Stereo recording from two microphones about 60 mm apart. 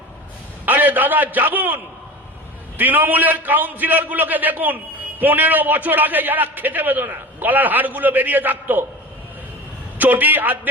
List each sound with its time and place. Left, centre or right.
0.6 s a man's voice: right
10.0 s a man's voice: right